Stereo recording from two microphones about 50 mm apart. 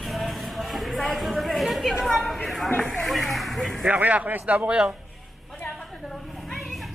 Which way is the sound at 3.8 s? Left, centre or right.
Right.